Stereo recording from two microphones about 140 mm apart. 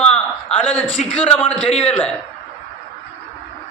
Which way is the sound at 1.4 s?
45° left (ahead or behind).